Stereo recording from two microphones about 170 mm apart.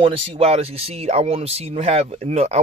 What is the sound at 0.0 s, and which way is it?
Speech, 35° right (ahead or behind).